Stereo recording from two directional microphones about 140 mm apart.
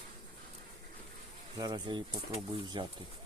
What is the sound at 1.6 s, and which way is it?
Speech, 30° right (ahead or behind).